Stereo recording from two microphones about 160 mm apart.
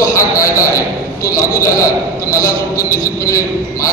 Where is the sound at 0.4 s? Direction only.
20° left (ahead or behind).